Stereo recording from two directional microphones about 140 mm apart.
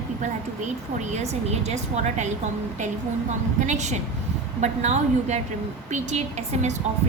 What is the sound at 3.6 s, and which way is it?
A woman's voice, 60° right (ahead or behind).